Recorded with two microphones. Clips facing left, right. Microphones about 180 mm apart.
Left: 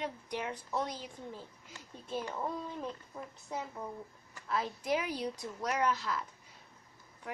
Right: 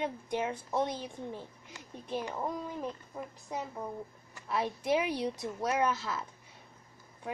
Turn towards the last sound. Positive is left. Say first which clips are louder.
# right 2 dB
turn(degrees=-20)  # may be behind; listen again after turning